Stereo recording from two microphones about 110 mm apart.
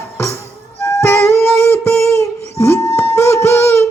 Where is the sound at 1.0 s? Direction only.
20° left (ahead or behind).